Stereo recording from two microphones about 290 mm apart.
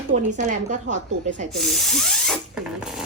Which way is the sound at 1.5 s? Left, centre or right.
Centre.